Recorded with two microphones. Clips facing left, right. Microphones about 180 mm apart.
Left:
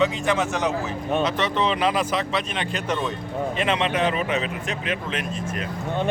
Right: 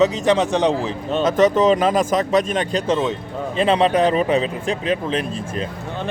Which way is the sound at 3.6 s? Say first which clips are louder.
Right 8 dB; 35° right (ahead or behind).